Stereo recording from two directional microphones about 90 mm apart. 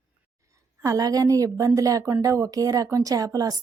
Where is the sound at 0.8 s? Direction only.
40° right (ahead or behind).